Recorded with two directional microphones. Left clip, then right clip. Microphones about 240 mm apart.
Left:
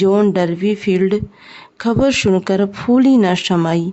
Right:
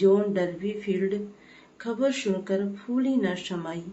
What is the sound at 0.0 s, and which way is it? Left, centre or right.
Speech, left.